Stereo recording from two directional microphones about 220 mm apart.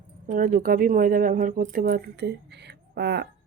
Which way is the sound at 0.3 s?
40° right (ahead or behind).